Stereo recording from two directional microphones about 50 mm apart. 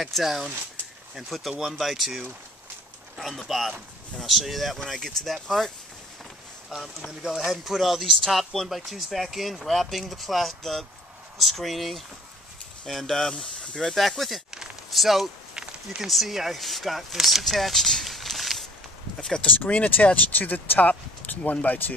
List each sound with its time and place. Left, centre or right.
0.0 s speech: centre
7.1 s speech: centre
15.5 s a sound: centre
16.0 s speech: centre
19.4 s speech: left